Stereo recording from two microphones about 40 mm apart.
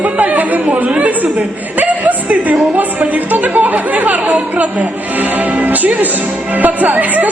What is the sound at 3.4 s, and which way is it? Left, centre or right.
A woman's voice, right.